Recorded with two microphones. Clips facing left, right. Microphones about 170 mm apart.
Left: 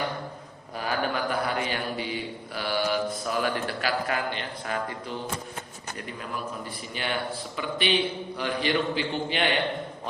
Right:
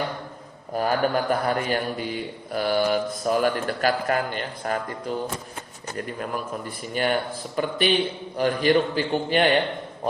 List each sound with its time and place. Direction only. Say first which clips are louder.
0.7 s speech: right 6 dB; 45° right (ahead or behind)